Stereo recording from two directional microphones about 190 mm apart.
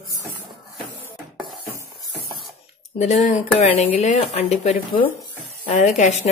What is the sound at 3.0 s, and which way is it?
A woman's voice, 40° left (ahead or behind).